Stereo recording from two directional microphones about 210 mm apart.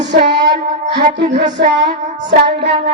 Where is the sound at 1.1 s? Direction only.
55° right (ahead or behind).